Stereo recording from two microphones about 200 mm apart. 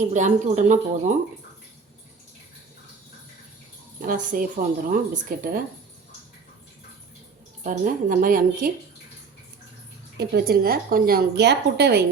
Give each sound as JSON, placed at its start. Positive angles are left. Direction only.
{"t": 0.0, "sound": "speech", "side_deg": -35}
{"t": 4.0, "sound": "a woman's voice", "side_deg": -45}
{"t": 7.6, "sound": "speech", "side_deg": -40}
{"t": 10.2, "sound": "a woman's voice", "side_deg": -55}